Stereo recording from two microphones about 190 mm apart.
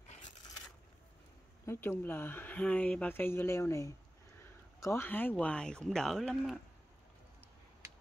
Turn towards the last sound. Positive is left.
turn(degrees=0)  # may be behind; listen again after turning